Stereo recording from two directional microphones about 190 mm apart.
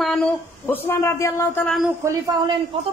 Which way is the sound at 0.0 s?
5° left (ahead or behind).